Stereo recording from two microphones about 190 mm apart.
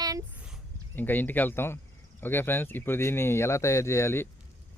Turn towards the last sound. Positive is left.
turn(degrees=15)  # may be behind; listen again after turning